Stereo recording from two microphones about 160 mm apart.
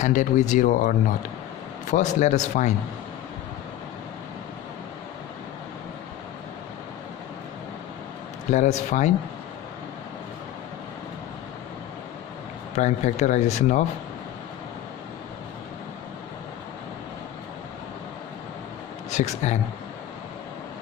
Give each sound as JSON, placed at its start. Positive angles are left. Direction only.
{"t": 0.0, "sound": "speech", "side_deg": 50}
{"t": 8.5, "sound": "speech", "side_deg": 45}
{"t": 12.7, "sound": "speech", "side_deg": 45}
{"t": 19.0, "sound": "speech", "side_deg": 45}